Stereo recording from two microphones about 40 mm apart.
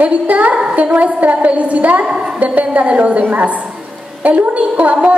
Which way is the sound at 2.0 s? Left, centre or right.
Centre.